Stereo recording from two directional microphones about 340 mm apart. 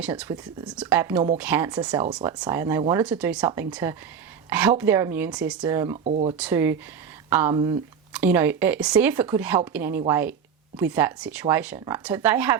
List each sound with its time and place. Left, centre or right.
0.0 s speech: centre
6.3 s speech: centre